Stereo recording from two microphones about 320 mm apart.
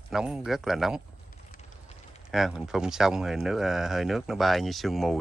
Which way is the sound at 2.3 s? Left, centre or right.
Centre.